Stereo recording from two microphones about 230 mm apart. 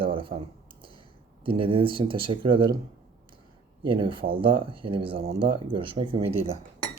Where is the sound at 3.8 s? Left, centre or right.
Right.